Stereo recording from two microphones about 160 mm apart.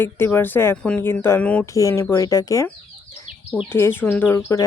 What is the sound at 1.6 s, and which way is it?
Speech, 20° left (ahead or behind).